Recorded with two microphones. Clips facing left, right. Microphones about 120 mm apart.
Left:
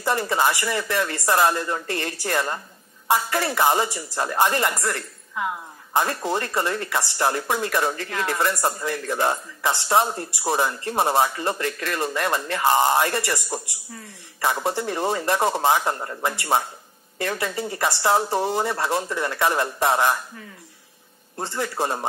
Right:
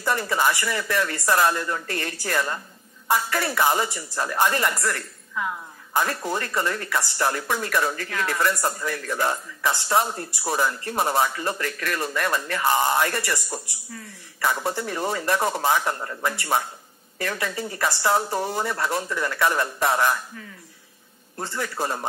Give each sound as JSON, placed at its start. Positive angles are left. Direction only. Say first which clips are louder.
{"t": 0.0, "sound": "speech", "louder": "left 1 dB", "side_deg": 25}